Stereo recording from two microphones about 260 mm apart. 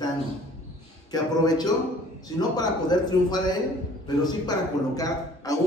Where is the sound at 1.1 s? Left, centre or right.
Centre.